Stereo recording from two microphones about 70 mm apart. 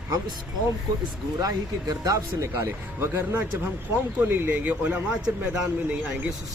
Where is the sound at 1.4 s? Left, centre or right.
Right.